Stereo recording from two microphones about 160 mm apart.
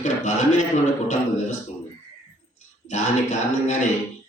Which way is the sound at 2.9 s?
45° left (ahead or behind).